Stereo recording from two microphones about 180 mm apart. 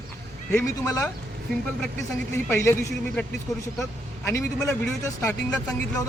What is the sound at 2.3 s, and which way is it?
A man's voice, 15° left (ahead or behind).